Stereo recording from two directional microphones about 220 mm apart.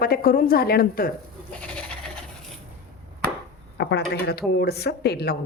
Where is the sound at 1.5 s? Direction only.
5° left (ahead or behind).